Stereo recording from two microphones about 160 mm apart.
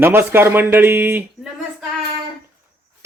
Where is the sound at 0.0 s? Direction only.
15° right (ahead or behind).